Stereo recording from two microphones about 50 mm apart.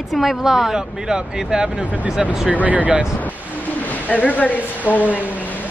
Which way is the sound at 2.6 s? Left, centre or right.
Right.